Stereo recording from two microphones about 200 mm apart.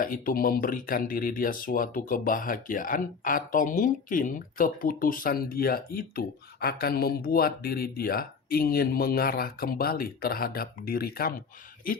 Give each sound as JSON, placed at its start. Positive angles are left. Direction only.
{"t": 0.0, "sound": "speech", "side_deg": 45}